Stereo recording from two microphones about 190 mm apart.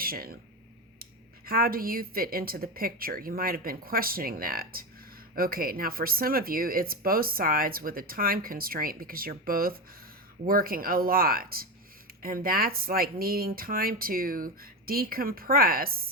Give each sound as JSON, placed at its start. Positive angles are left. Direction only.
{"t": 0.0, "sound": "speech", "side_deg": -50}
{"t": 1.5, "sound": "speech", "side_deg": -50}